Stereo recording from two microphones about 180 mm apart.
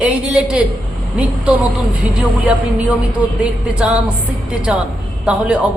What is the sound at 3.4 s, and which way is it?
Speech, 5° right (ahead or behind).